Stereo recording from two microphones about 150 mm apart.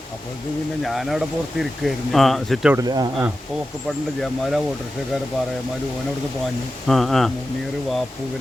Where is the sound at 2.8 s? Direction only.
25° right (ahead or behind).